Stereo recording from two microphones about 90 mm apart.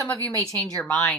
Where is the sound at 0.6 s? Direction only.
5° left (ahead or behind).